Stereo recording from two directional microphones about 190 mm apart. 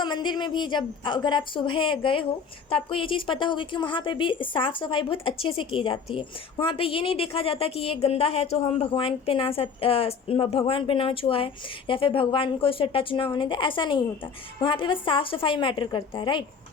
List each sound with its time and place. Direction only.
0.0 s a woman's voice: 25° left (ahead or behind)